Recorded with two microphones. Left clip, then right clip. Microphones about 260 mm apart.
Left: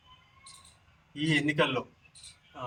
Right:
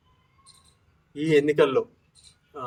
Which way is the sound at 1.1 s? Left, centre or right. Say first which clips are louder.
Right 8 dB; centre.